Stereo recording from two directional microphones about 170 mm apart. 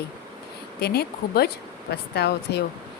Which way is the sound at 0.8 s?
70° left (ahead or behind).